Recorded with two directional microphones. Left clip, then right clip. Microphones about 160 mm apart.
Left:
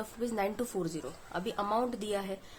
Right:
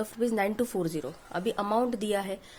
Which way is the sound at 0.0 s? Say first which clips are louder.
Right 5 dB; 40° right (ahead or behind).